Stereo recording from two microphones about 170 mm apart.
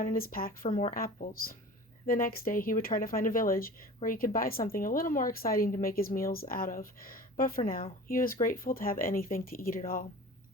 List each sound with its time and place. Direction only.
0.0 s speech: 55° left (ahead or behind)